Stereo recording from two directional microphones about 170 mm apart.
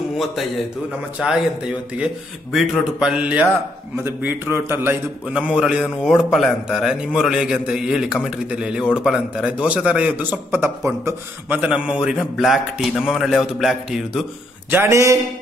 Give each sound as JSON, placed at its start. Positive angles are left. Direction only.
{"t": 1.2, "sound": "a man's voice", "side_deg": -5}
{"t": 2.5, "sound": "a man's voice", "side_deg": 0}
{"t": 14.7, "sound": "a man's voice", "side_deg": -15}